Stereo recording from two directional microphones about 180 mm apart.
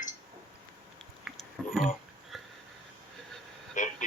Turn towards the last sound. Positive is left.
turn(degrees=45)  # may be behind; listen again after turning